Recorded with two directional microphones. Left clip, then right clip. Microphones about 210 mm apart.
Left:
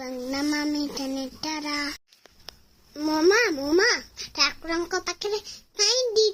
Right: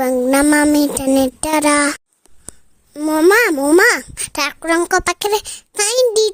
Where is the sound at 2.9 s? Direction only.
40° right (ahead or behind).